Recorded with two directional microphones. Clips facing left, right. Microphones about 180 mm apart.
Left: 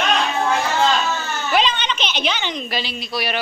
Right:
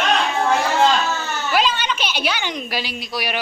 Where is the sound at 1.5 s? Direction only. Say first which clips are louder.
Even; 5° right (ahead or behind).